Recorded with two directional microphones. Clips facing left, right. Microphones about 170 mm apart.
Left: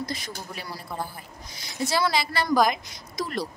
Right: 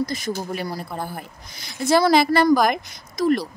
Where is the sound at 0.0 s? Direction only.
45° right (ahead or behind).